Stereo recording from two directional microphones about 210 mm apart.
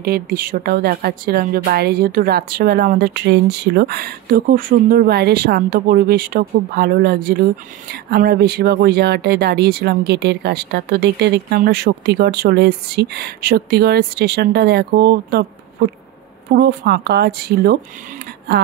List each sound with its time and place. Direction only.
0.0 s speech: 45° right (ahead or behind)